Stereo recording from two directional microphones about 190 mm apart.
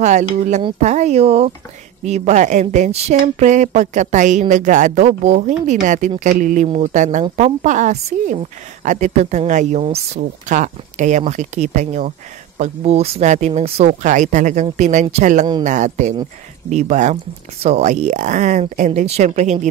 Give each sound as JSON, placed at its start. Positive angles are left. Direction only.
{"t": 0.0, "sound": "speech", "side_deg": -40}